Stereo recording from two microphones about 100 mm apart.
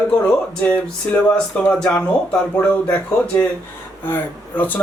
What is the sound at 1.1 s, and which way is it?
Speech, 15° left (ahead or behind).